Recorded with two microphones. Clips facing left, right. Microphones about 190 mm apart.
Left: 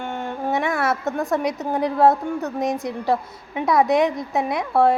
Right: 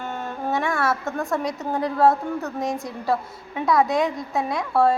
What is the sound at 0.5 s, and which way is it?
A woman's voice, 20° left (ahead or behind).